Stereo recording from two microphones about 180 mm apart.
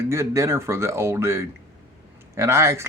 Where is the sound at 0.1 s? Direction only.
15° right (ahead or behind).